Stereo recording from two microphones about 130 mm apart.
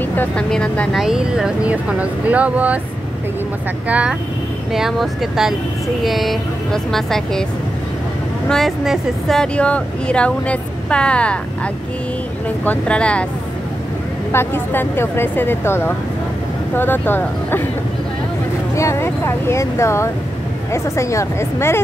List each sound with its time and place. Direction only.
0.0 s speech: 15° left (ahead or behind); by 2.8 s 10° right (ahead or behind)
3.9 s speech: 10° right (ahead or behind)
8.5 s speech: centre (ahead or behind)
14.3 s speech: 15° left (ahead or behind)
18.8 s speech: 20° left (ahead or behind)